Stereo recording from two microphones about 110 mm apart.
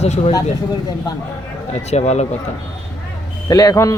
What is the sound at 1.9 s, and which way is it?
Speech, 85° left.